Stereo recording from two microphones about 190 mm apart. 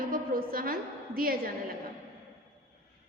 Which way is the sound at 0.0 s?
50° right (ahead or behind).